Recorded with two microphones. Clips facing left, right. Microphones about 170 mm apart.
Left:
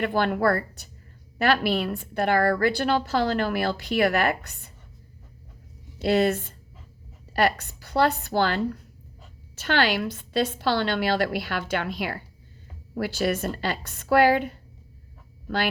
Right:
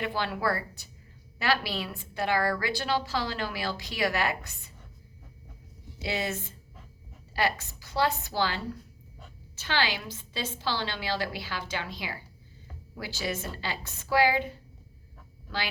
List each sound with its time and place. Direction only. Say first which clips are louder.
0.0 s a woman's voice: left 7 dB; 55° left (ahead or behind)
6.0 s a woman's voice: left 11 dB; 60° left (ahead or behind)